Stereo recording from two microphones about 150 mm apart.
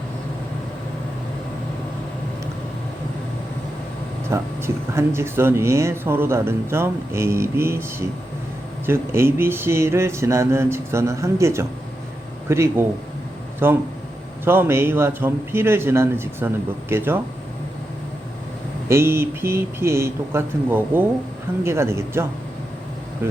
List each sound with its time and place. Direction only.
4.3 s speech: 15° right (ahead or behind)
18.9 s speech: 15° right (ahead or behind)